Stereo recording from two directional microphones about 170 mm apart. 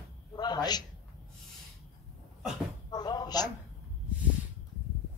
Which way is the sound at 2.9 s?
25° left (ahead or behind).